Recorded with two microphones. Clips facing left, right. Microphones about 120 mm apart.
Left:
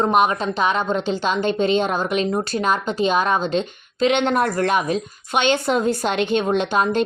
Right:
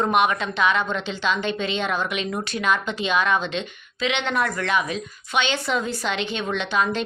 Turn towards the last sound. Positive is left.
turn(degrees=45)  # may be behind; listen again after turning